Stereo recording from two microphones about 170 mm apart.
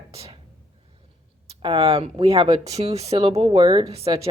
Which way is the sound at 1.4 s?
35° right (ahead or behind).